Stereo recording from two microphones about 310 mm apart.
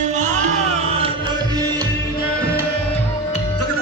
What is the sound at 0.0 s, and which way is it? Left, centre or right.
Music, right.